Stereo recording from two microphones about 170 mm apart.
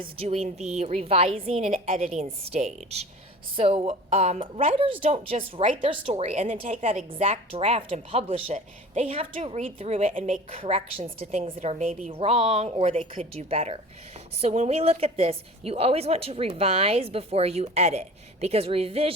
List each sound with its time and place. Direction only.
0.0 s a woman's voice: 35° right (ahead or behind)